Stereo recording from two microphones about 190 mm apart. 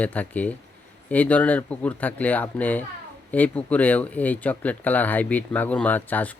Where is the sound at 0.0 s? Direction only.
10° left (ahead or behind).